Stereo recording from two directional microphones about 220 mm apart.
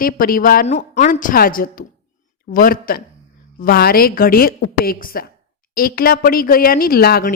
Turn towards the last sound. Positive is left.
turn(degrees=45)  # may be behind; listen again after turning